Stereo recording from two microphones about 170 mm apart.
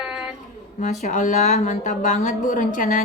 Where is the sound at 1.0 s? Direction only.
50° left (ahead or behind).